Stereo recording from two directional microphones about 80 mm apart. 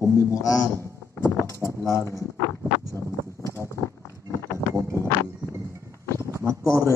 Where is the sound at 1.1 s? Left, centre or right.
Left.